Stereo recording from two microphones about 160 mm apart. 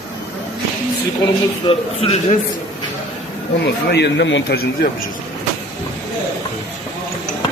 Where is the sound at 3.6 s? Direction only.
90° left.